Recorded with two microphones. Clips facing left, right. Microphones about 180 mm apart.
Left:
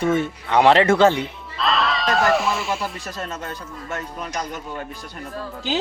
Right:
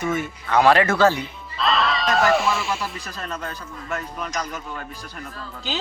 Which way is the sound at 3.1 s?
20° left (ahead or behind).